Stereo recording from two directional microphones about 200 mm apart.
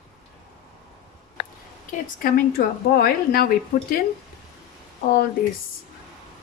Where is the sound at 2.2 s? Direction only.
50° left (ahead or behind).